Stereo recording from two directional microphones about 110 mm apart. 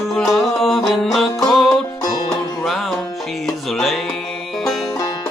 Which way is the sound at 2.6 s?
Centre (ahead or behind).